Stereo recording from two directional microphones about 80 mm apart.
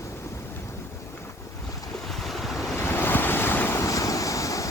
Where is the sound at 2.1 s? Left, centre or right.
Centre.